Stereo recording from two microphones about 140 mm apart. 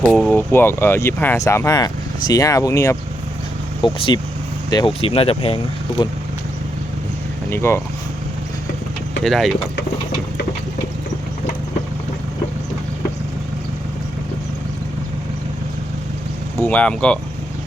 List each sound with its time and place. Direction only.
0.0 s speech: centre (ahead or behind)
0.3 s speech: 15° left (ahead or behind)
3.8 s speech: 35° left (ahead or behind)
7.5 s speech: 15° left (ahead or behind)
9.2 s speech: centre (ahead or behind)
16.6 s speech: 10° left (ahead or behind)